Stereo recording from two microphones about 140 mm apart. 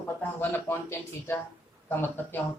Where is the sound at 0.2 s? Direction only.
15° left (ahead or behind).